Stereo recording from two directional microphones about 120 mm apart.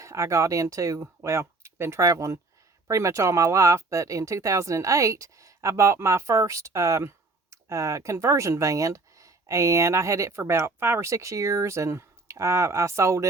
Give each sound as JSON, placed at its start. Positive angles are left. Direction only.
{"t": 0.0, "sound": "speech", "side_deg": -25}